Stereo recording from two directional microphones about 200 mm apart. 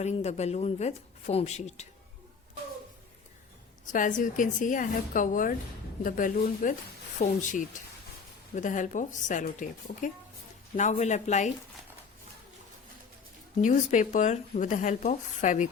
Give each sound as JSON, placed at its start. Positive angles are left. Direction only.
{"t": 0.0, "sound": "speech", "side_deg": 35}
{"t": 3.9, "sound": "speech", "side_deg": 40}
{"t": 13.6, "sound": "speech", "side_deg": 35}